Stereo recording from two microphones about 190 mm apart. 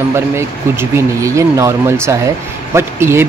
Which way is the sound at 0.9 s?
15° right (ahead or behind).